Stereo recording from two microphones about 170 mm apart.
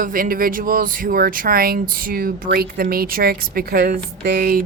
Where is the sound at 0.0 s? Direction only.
55° right (ahead or behind).